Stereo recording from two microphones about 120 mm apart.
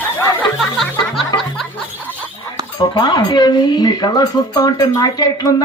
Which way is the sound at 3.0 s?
40° left (ahead or behind).